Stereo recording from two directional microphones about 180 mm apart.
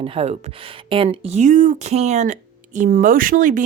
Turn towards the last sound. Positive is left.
turn(degrees=-45)  # may be behind; listen again after turning